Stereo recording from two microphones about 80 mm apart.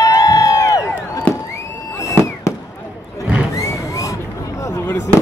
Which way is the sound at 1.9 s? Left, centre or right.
Left.